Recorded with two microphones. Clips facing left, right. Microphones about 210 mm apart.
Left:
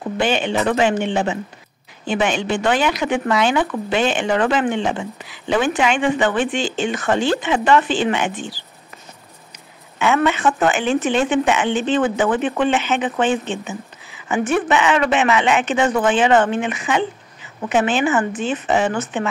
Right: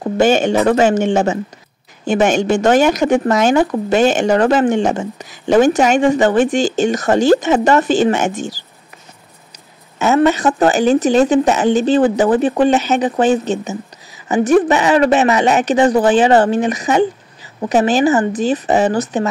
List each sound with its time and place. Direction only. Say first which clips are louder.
0.0 s speech: right 7 dB; 45° right (ahead or behind)
9.9 s speech: right 5 dB; 40° right (ahead or behind)